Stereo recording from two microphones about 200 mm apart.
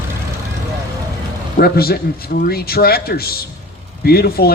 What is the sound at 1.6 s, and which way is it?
A man's voice, 50° left (ahead or behind).